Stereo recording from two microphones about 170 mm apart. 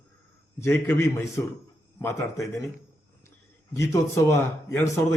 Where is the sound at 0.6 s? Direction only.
15° left (ahead or behind).